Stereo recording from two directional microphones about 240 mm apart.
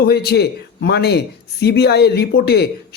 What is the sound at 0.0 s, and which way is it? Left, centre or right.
Speech, left.